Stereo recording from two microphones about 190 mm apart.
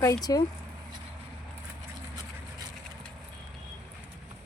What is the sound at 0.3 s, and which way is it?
Speech, 20° left (ahead or behind).